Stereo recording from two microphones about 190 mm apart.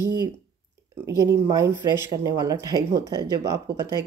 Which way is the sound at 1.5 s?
15° right (ahead or behind).